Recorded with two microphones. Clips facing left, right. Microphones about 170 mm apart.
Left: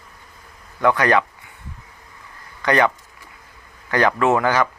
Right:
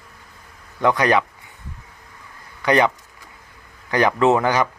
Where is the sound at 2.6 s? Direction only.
15° right (ahead or behind).